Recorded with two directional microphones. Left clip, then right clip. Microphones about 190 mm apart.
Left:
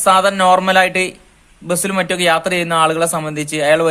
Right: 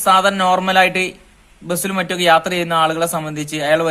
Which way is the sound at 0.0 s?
25° left (ahead or behind).